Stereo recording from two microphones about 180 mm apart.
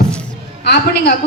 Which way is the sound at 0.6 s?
65° left (ahead or behind).